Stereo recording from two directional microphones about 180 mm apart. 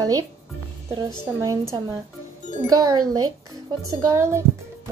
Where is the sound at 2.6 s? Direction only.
20° right (ahead or behind).